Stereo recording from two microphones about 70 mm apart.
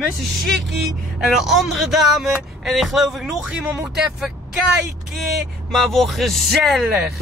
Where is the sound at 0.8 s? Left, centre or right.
Centre.